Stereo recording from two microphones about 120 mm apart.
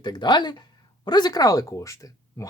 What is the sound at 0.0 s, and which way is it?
Speech, 35° left (ahead or behind).